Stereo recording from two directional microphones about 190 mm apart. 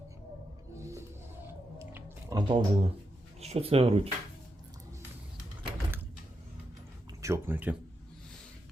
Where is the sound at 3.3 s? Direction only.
35° right (ahead or behind).